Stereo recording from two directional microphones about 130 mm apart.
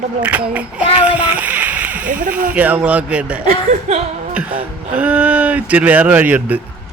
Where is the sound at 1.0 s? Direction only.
10° right (ahead or behind).